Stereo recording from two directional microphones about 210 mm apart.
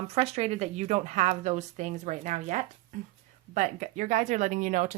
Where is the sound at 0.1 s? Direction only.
30° right (ahead or behind).